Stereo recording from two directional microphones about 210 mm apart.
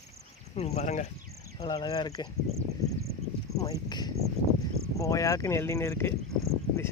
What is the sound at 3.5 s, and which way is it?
Speech, 15° left (ahead or behind).